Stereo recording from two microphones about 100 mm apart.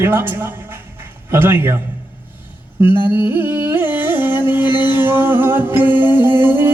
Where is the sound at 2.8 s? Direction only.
20° right (ahead or behind).